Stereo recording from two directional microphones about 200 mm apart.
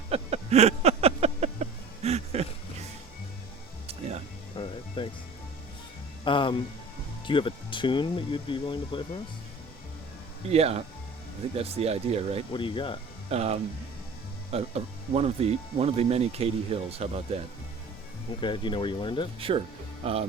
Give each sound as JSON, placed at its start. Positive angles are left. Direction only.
{"t": 0.1, "sound": "a sound", "side_deg": -30}
{"t": 4.5, "sound": "music", "side_deg": 25}
{"t": 6.2, "sound": "music", "side_deg": 25}
{"t": 7.3, "sound": "speech", "side_deg": 25}
{"t": 10.5, "sound": "speech", "side_deg": -30}
{"t": 12.5, "sound": "speech", "side_deg": 25}
{"t": 13.3, "sound": "speech", "side_deg": -30}
{"t": 18.3, "sound": "speech", "side_deg": 25}
{"t": 19.4, "sound": "speech", "side_deg": -25}